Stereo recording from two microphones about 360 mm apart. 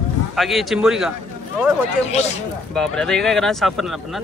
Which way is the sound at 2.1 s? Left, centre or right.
Centre.